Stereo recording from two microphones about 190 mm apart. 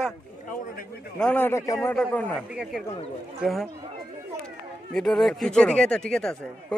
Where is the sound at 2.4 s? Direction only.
5° right (ahead or behind).